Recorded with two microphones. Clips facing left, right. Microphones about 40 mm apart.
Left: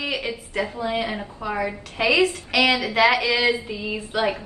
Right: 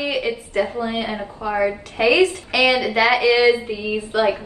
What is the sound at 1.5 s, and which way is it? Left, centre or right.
Speech, right.